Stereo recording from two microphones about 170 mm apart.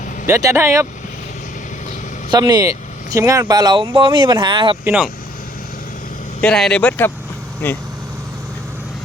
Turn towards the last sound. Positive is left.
turn(degrees=10)  # may be behind; listen again after turning